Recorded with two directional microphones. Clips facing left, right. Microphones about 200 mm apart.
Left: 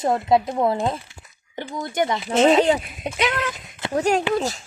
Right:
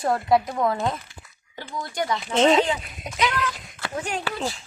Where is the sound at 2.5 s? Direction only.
40° left (ahead or behind).